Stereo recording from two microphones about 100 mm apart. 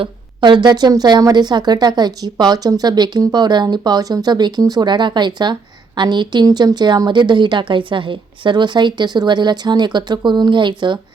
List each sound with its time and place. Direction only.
0.0 s speech: 50° right (ahead or behind)